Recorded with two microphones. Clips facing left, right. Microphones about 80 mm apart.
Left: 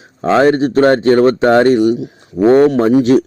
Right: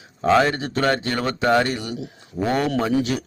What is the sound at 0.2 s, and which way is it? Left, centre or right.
Speech, left.